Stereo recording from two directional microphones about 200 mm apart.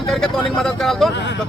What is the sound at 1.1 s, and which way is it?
Speech, 60° left (ahead or behind).